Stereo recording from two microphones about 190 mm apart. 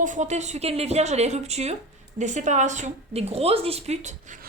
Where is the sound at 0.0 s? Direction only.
40° right (ahead or behind).